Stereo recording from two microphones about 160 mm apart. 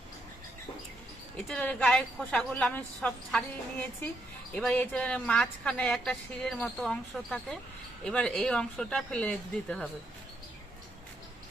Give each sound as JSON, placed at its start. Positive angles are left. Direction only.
{"t": 1.5, "sound": "a woman's voice", "side_deg": 5}